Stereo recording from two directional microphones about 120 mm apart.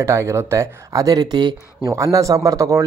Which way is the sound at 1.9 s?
25° right (ahead or behind).